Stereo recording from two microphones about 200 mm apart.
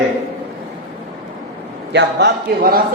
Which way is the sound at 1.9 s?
50° right (ahead or behind).